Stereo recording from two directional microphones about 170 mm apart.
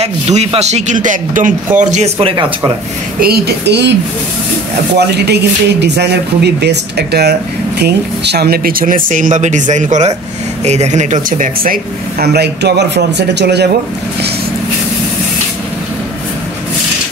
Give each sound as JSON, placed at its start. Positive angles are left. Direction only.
{"t": 0.0, "sound": "speech", "side_deg": -40}
{"t": 3.2, "sound": "speech", "side_deg": -65}
{"t": 4.9, "sound": "speech", "side_deg": -75}